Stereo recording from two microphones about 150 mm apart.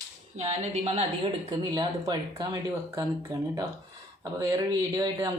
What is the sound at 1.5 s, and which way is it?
Speech, 30° right (ahead or behind).